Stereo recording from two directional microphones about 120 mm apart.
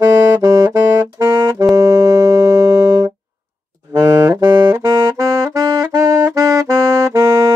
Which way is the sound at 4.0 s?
25° right (ahead or behind).